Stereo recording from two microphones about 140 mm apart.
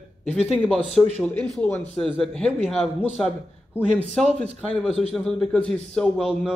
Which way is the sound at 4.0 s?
5° left (ahead or behind).